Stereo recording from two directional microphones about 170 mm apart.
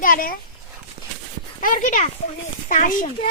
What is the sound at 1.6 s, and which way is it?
Speech, 50° left (ahead or behind).